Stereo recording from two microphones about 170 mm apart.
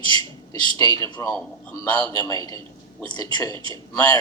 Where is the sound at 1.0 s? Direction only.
20° left (ahead or behind).